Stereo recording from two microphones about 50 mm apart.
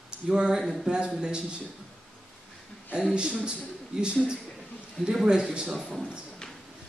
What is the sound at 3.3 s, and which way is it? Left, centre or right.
Speech, centre.